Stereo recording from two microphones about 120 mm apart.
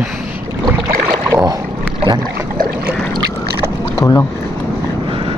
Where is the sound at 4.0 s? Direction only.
30° left (ahead or behind).